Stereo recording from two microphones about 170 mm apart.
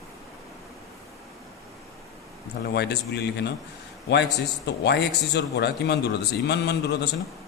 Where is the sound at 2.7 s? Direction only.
80° left.